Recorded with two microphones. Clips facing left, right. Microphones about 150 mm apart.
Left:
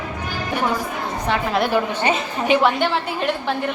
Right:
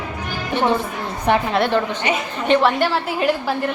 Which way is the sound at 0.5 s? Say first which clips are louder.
Right 4 dB; 25° right (ahead or behind).